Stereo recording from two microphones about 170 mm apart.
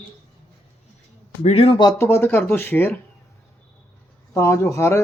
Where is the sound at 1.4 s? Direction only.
35° left (ahead or behind).